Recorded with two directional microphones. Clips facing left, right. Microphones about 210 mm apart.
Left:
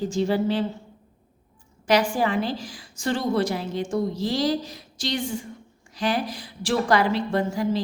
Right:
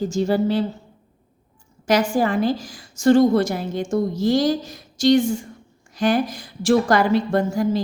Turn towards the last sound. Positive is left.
turn(degrees=-45)  # may be behind; listen again after turning